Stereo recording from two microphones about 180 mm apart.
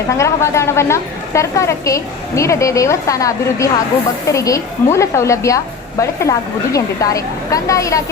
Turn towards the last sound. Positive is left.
turn(degrees=15)  # may be behind; listen again after turning